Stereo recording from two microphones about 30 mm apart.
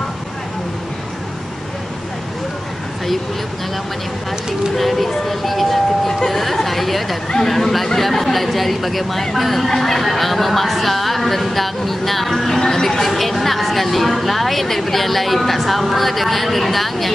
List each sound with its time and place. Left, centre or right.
4.7 s a woman's voice: centre
12.5 s music: left
12.8 s a woman's voice: centre